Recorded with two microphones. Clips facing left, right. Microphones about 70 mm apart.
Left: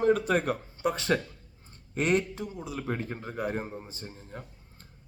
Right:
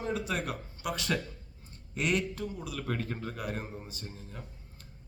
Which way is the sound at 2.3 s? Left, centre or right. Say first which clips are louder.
Left 1 dB; left.